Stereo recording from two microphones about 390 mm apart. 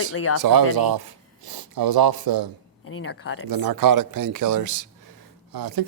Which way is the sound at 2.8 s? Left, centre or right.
Left.